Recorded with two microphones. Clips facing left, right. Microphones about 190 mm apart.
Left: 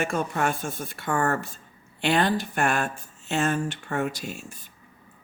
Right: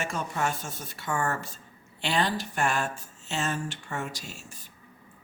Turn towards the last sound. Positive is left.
turn(degrees=55)  # may be behind; listen again after turning